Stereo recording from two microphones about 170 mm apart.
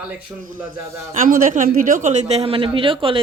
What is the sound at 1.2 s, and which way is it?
A man's voice, 50° right (ahead or behind).